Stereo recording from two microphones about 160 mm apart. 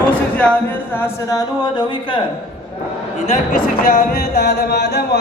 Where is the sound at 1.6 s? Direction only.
30° left (ahead or behind).